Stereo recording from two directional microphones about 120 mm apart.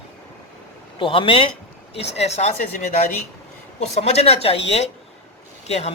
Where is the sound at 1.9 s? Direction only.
60° left (ahead or behind).